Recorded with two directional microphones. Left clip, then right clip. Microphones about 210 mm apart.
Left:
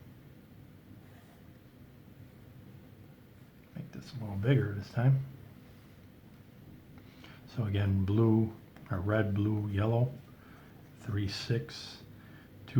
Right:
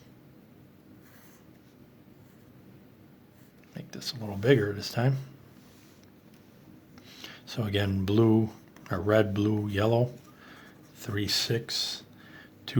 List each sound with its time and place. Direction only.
3.9 s speech: 40° right (ahead or behind)
7.2 s speech: 35° right (ahead or behind)
11.0 s speech: 35° right (ahead or behind)